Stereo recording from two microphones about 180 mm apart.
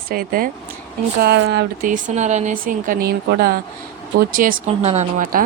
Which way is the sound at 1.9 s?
45° right (ahead or behind).